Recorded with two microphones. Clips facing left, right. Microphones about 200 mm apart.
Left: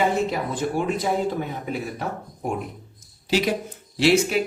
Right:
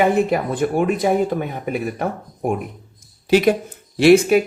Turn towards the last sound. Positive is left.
turn(degrees=-55)  # may be behind; listen again after turning